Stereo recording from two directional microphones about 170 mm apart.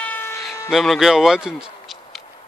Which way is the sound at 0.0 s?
10° left (ahead or behind).